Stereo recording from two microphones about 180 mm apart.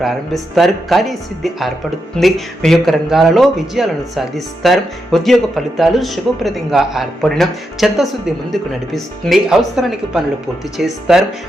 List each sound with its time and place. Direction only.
0.0 s speech: centre (ahead or behind)